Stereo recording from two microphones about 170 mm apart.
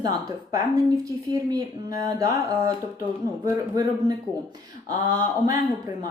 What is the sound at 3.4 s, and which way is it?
A woman's voice, 20° right (ahead or behind).